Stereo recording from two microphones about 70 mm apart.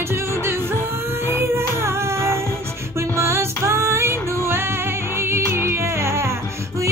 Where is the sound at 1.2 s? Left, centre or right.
Right.